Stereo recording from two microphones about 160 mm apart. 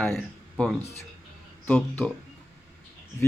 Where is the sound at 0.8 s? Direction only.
40° left (ahead or behind).